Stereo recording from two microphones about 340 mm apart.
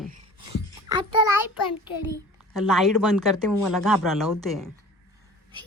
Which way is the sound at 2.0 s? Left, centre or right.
Centre.